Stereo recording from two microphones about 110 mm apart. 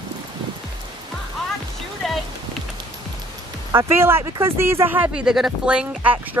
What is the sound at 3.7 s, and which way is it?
Speech, 25° right (ahead or behind).